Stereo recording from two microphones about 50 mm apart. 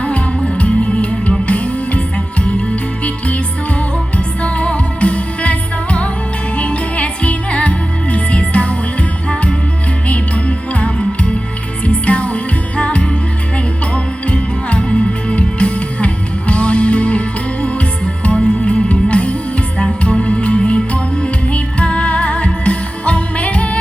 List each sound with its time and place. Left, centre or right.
0.0 s music: left
3.0 s music: left